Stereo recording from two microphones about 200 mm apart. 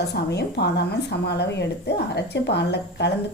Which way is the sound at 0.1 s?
55° left (ahead or behind).